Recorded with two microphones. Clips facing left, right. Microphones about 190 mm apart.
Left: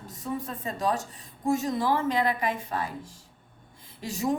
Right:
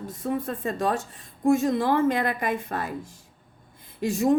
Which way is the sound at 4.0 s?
55° right (ahead or behind).